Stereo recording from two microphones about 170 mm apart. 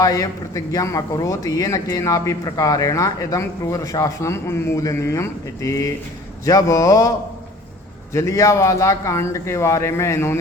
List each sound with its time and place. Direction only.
0.0 s speech: 20° left (ahead or behind)
8.1 s speech: 15° left (ahead or behind)